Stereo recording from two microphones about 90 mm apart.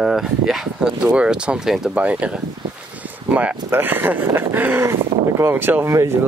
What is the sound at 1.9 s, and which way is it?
Speech, 15° right (ahead or behind).